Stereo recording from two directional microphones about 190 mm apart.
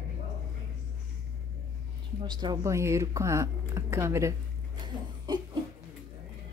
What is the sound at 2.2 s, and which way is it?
Speech, 25° right (ahead or behind).